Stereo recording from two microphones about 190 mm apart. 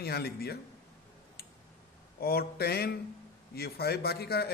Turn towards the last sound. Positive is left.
turn(degrees=55)  # may be behind; listen again after turning